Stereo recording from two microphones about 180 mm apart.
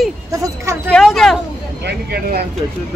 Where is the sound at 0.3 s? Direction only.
15° right (ahead or behind).